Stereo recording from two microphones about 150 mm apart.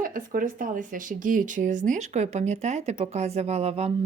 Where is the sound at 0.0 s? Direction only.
70° right (ahead or behind).